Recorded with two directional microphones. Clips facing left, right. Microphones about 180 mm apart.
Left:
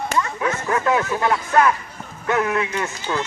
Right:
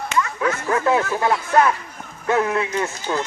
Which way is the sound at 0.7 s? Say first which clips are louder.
Right 1 dB; 25° right (ahead or behind).